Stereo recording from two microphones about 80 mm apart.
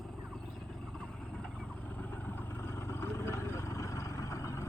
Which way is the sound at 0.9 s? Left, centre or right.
Centre.